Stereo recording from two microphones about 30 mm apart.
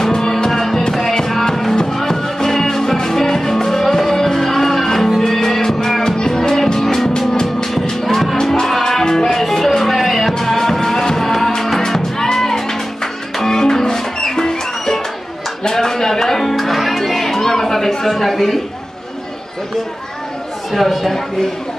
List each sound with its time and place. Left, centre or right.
0.1 s music: centre
0.6 s music: centre
15.6 s a sound: centre
16.3 s music: centre
17.4 s chatter: centre
18.0 s a sound: centre
20.7 s speech: centre